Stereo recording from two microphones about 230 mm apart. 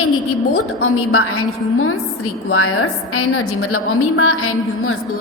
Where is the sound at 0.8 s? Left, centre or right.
Left.